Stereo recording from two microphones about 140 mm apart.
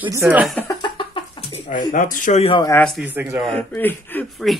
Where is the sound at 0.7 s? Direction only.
30° left (ahead or behind).